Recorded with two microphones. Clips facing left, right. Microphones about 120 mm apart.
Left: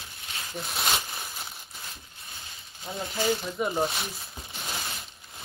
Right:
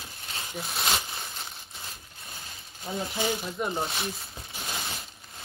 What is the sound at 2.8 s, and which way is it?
Speech, centre (ahead or behind).